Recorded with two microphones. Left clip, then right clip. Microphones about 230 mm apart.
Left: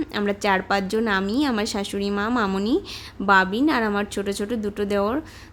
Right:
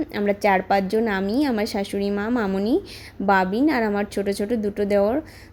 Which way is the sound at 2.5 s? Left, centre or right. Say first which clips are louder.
Right 1 dB; left.